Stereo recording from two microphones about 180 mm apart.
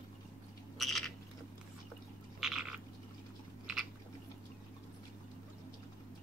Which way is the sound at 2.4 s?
5° right (ahead or behind).